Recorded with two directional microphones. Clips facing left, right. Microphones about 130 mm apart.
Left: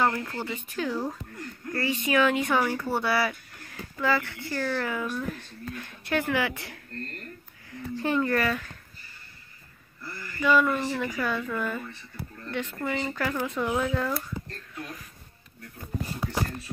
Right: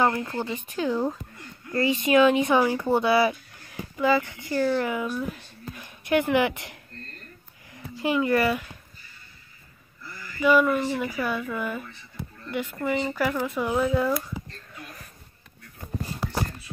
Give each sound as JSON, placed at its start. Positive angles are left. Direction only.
{"t": 0.0, "sound": "speech", "side_deg": -15}
{"t": 10.4, "sound": "speech", "side_deg": -10}